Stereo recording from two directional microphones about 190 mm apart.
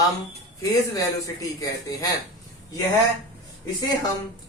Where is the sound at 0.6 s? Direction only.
20° left (ahead or behind).